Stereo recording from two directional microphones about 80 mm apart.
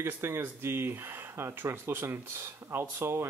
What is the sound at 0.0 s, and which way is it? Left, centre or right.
Speech, right.